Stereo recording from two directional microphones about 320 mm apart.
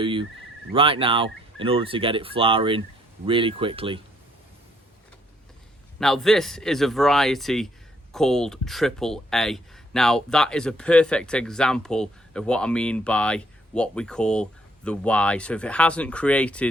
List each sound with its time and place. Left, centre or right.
0.0 s a sound: centre
0.7 s speech: centre
6.0 s speech: centre